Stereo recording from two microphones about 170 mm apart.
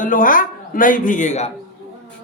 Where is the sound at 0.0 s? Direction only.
55° left (ahead or behind).